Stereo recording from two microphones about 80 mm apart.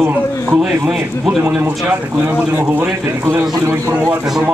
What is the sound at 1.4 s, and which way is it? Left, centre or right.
Speech, right.